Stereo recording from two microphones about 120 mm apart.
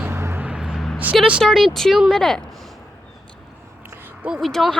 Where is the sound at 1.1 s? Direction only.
Centre (ahead or behind).